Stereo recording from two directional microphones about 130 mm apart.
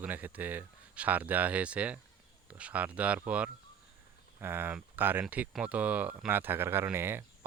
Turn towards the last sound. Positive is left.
turn(degrees=-20)  # may be behind; listen again after turning